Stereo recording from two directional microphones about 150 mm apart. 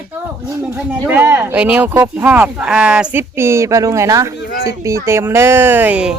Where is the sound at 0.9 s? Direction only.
15° right (ahead or behind).